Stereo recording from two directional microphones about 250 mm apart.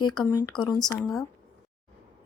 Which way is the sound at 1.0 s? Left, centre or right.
Centre.